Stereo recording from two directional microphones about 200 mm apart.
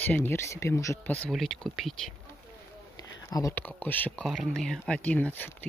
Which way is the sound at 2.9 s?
15° left (ahead or behind).